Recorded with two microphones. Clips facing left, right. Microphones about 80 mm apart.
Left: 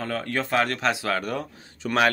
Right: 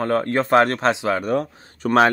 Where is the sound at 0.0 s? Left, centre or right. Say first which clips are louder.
Right 8 dB; right.